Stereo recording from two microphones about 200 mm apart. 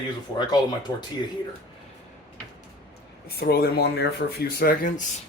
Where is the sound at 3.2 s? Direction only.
50° left (ahead or behind).